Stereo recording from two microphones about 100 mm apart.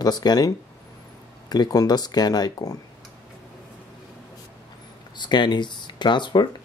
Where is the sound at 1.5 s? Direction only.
40° left (ahead or behind).